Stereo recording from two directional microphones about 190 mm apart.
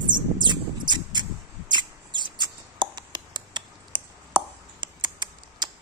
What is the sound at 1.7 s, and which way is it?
Mouse, 25° right (ahead or behind).